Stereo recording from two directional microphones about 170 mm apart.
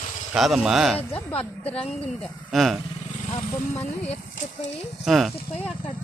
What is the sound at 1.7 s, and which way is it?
Speech, 35° left (ahead or behind).